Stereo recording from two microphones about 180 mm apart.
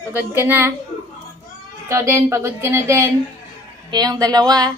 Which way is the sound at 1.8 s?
15° right (ahead or behind).